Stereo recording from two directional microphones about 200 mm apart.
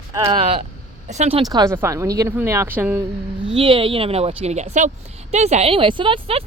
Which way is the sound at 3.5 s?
25° right (ahead or behind).